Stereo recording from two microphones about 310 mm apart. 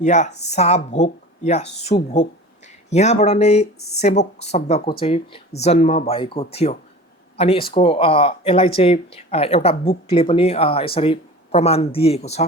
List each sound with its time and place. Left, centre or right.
0.0 s speech: left